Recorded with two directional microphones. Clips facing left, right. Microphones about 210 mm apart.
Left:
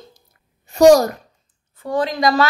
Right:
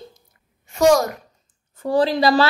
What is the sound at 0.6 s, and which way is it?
Speech, 35° left (ahead or behind).